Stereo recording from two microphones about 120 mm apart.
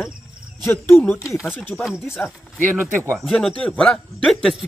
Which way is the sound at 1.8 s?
Centre (ahead or behind).